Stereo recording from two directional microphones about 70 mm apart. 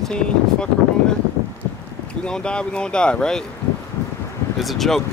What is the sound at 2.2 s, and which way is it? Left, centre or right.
Speech, centre.